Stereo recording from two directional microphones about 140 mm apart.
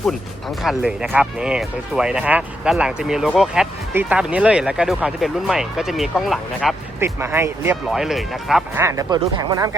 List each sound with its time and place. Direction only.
0.6 s speech: 5° right (ahead or behind)
7.0 s speech: 20° right (ahead or behind)
7.9 s speech: centre (ahead or behind)
8.7 s speech: 20° right (ahead or behind)